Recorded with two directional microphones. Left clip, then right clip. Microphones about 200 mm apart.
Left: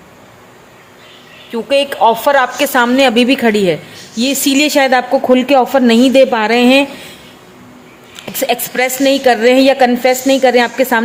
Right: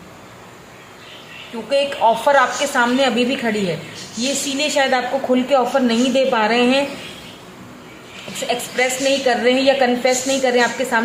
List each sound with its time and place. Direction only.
1.7 s a woman's voice: 50° left (ahead or behind)
8.4 s a woman's voice: 50° left (ahead or behind)